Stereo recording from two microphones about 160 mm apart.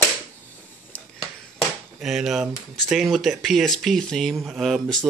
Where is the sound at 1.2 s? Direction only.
Centre (ahead or behind).